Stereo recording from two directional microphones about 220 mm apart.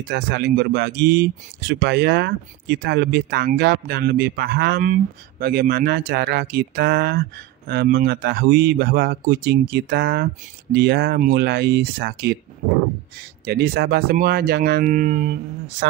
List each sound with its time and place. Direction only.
0.1 s speech: 45° right (ahead or behind)
13.5 s speech: 45° right (ahead or behind)